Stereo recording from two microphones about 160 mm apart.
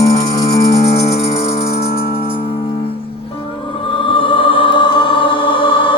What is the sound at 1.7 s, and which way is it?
Music, 80° left.